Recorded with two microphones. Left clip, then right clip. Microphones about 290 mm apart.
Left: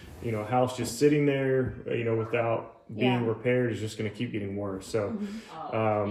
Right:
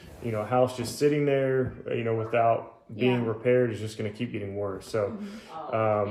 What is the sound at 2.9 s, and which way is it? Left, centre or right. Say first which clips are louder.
Speech: right 1 dB; centre.